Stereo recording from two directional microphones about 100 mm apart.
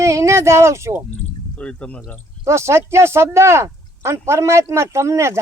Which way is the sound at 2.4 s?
30° right (ahead or behind).